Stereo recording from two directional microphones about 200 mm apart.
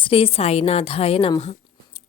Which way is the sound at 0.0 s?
25° left (ahead or behind).